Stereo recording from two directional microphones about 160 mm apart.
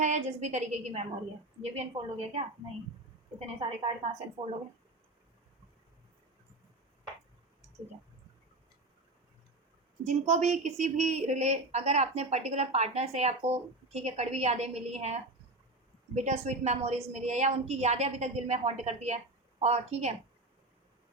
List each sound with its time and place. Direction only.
0.0 s a woman's voice: 45° right (ahead or behind)
10.0 s a woman's voice: 45° right (ahead or behind)